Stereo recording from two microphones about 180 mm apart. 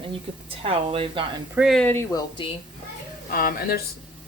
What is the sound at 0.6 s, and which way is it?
Speech, 30° right (ahead or behind).